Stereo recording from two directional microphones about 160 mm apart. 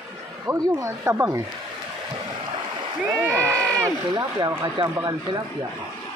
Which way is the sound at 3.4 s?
5° left (ahead or behind).